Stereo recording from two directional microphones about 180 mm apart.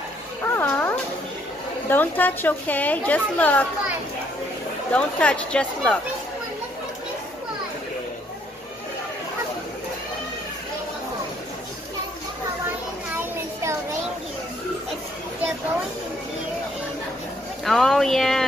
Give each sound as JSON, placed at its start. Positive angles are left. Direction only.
{"t": 0.6, "sound": "music", "side_deg": 10}
{"t": 1.9, "sound": "a woman's voice", "side_deg": 10}
{"t": 4.9, "sound": "a woman's voice", "side_deg": 5}
{"t": 13.2, "sound": "child singing", "side_deg": -15}
{"t": 17.6, "sound": "speech", "side_deg": 0}